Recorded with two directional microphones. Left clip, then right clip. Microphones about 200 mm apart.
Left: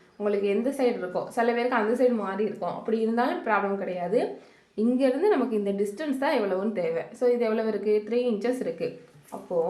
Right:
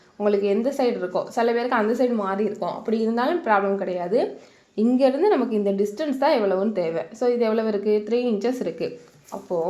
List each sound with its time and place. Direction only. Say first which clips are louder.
0.2 s a woman's voice: right 4 dB; 35° right (ahead or behind)